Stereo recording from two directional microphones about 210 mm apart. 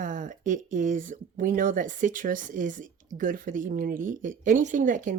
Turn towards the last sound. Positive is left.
turn(degrees=-40)  # may be behind; listen again after turning